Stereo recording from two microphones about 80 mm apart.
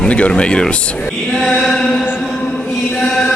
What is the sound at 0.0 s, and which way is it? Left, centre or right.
Speech, centre.